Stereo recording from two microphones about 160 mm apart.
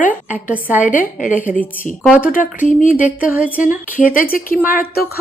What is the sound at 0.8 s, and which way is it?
Speech, 55° left (ahead or behind).